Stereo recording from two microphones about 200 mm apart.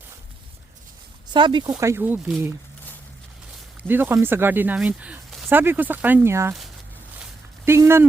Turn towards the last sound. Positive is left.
turn(degrees=-10)  # may be behind; listen again after turning